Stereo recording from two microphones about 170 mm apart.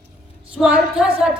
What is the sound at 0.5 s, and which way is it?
Speech, 5° right (ahead or behind).